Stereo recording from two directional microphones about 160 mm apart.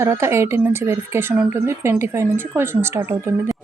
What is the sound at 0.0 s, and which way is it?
Speech, 15° right (ahead or behind).